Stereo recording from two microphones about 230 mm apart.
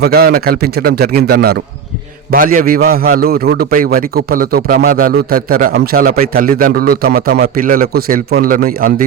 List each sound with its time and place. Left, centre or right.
0.0 s a man's voice: right